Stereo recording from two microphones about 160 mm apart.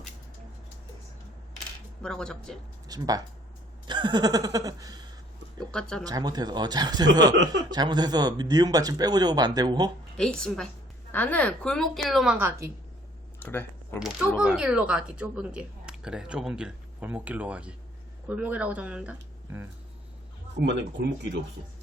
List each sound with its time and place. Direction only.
2.0 s a woman's voice: 5° left (ahead or behind)
2.8 s speech: 25° right (ahead or behind)
5.5 s a woman's voice: 5° left (ahead or behind)
6.1 s speech: 25° right (ahead or behind)
10.2 s a woman's voice: 5° left (ahead or behind)
12.5 s speech: 20° right (ahead or behind)
13.4 s speech: 15° left (ahead or behind)
14.3 s speech: 5° right (ahead or behind)
20.6 s speech: 90° right